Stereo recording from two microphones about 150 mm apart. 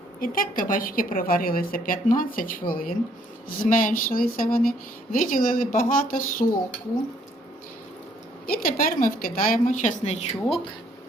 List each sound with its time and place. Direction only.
0.2 s a woman's voice: 65° left (ahead or behind)
8.4 s a woman's voice: 70° left (ahead or behind)
10.1 s speech: 45° left (ahead or behind)